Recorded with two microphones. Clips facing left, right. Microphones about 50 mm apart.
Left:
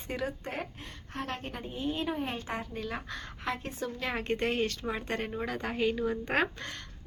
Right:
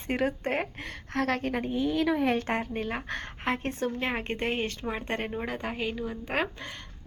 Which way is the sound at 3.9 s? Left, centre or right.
Right.